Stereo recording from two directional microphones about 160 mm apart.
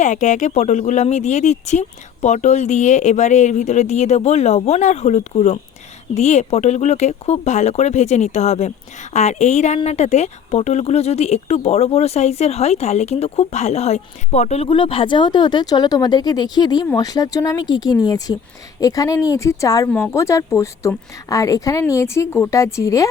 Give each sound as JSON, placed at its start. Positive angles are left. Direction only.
{"t": 0.0, "sound": "a woman's voice", "side_deg": 50}